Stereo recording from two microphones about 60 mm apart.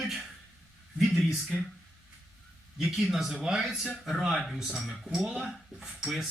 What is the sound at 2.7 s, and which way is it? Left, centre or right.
A man's voice, centre.